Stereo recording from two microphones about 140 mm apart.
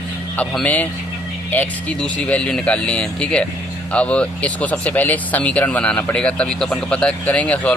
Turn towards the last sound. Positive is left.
turn(degrees=10)  # may be behind; listen again after turning